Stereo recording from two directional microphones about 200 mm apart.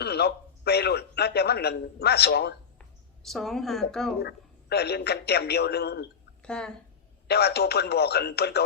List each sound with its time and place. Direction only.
0.0 s a man's voice: 55° left (ahead or behind)
3.2 s a woman's voice: centre (ahead or behind)
4.2 s a man's voice: 55° left (ahead or behind)
6.4 s speech: 5° left (ahead or behind)
7.3 s a man's voice: 55° left (ahead or behind)